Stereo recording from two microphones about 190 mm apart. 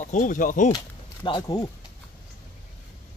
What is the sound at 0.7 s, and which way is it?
Speech, 25° left (ahead or behind).